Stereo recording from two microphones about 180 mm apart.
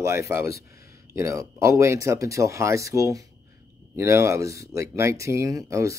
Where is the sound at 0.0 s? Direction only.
15° right (ahead or behind).